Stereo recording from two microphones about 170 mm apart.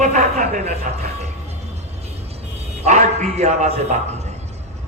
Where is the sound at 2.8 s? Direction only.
45° right (ahead or behind).